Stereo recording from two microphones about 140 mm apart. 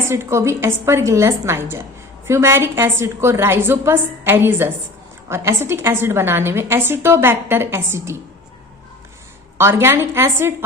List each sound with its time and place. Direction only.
0.1 s a woman's voice: 20° right (ahead or behind)
9.6 s a woman's voice: 20° right (ahead or behind)